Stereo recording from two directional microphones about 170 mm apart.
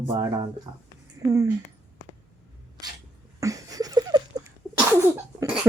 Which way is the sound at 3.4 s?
20° right (ahead or behind).